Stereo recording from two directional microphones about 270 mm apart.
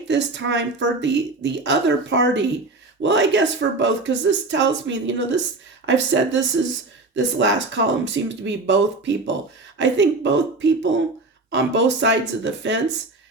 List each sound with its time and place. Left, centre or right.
0.1 s speech: right